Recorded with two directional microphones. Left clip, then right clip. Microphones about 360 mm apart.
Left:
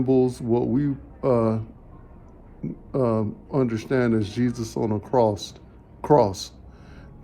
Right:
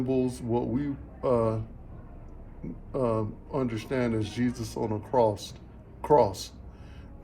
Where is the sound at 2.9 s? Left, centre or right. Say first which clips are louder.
Left 5 dB; centre.